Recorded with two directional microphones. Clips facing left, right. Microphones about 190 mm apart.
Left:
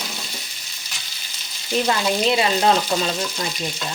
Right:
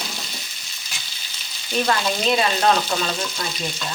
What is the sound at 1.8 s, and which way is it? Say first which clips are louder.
Speech: left 1 dB; 20° left (ahead or behind).